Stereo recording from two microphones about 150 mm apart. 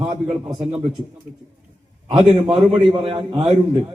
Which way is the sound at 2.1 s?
35° right (ahead or behind).